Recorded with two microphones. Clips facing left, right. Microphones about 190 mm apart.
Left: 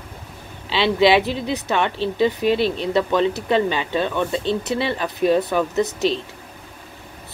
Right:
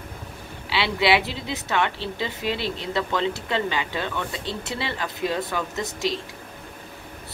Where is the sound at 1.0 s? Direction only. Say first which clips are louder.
Left 6 dB; 20° left (ahead or behind).